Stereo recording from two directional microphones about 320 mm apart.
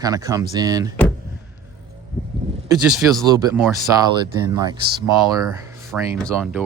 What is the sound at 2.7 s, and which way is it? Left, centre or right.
Speech, centre.